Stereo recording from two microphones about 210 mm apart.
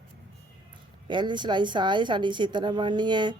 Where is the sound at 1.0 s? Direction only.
20° right (ahead or behind).